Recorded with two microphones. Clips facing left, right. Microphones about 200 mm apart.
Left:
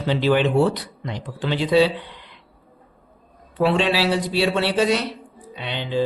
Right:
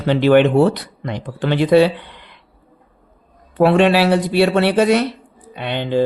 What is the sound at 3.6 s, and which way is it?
Speech, 55° right (ahead or behind).